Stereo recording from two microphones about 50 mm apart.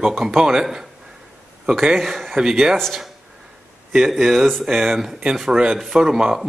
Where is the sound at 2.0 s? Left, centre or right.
Centre.